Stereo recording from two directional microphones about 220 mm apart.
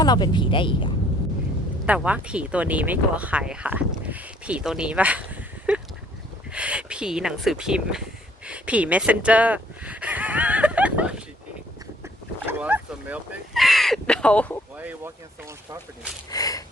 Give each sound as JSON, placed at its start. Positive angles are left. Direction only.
{"t": 0.0, "sound": "speech", "side_deg": 20}
{"t": 1.9, "sound": "speech", "side_deg": -5}
{"t": 5.7, "sound": "duck", "side_deg": -5}
{"t": 6.5, "sound": "speech", "side_deg": -5}
{"t": 8.4, "sound": "a sound", "side_deg": -5}
{"t": 12.5, "sound": "a sound", "side_deg": -10}
{"t": 14.8, "sound": "speech", "side_deg": -10}
{"t": 16.3, "sound": "gasp", "side_deg": 15}